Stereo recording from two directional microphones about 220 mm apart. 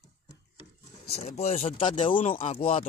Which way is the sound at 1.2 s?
30° left (ahead or behind).